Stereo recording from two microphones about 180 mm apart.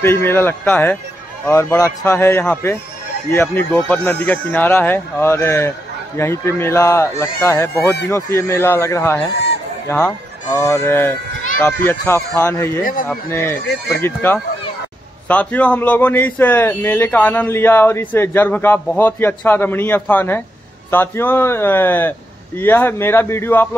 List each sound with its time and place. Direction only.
0.0 s a man's voice: 15° left (ahead or behind)